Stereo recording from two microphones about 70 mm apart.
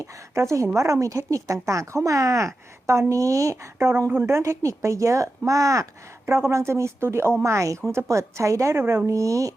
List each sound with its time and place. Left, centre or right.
0.5 s a woman's voice: right
3.8 s a woman's voice: right
6.2 s speech: right
8.8 s speech: right
9.0 s a woman's voice: right